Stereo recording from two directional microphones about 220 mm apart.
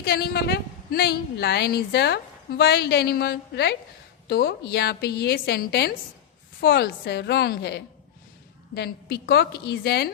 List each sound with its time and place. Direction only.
0.0 s a woman's voice: 45° left (ahead or behind)